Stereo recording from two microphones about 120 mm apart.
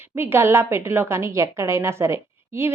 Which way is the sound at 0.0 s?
20° right (ahead or behind).